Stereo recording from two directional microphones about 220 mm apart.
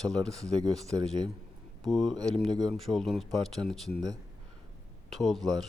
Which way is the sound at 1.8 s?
Centre (ahead or behind).